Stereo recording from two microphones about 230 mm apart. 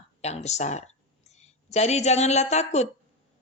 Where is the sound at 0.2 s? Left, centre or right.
Left.